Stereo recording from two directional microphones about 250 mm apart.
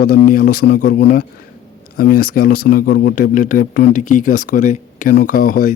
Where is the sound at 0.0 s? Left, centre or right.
Left.